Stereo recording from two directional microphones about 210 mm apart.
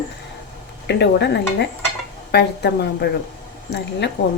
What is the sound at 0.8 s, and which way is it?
Speech, 55° left (ahead or behind).